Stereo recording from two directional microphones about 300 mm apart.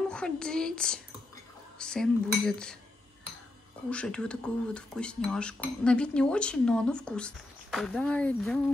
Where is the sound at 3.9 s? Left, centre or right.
Centre.